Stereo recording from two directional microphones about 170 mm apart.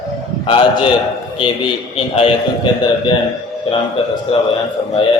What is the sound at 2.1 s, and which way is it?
A man's voice, 30° left (ahead or behind).